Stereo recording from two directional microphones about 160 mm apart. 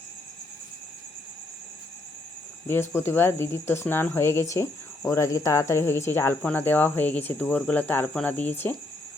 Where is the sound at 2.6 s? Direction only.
15° left (ahead or behind).